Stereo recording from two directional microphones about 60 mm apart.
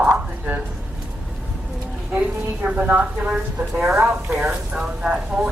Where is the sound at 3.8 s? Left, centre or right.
Centre.